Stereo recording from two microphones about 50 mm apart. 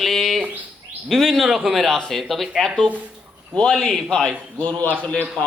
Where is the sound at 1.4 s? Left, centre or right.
Centre.